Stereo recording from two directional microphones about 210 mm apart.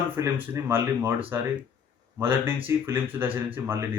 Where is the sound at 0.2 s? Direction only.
15° right (ahead or behind).